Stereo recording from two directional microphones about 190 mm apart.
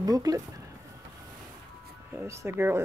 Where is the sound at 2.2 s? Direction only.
15° right (ahead or behind).